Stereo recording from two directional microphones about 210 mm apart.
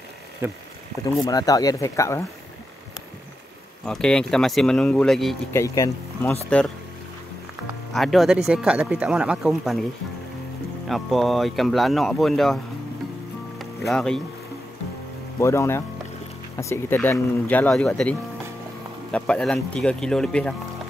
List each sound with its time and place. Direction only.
0.4 s speech: 10° right (ahead or behind)
1.2 s speech: 15° left (ahead or behind)
3.8 s speech: 5° left (ahead or behind)
5.5 s speech: 15° left (ahead or behind)
7.9 s speech: centre (ahead or behind)
10.9 s speech: centre (ahead or behind)
13.6 s music: centre (ahead or behind)
15.4 s speech: 15° left (ahead or behind)
19.1 s speech: 5° left (ahead or behind)